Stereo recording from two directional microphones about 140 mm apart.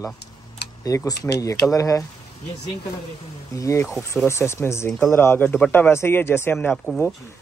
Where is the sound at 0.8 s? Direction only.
25° left (ahead or behind).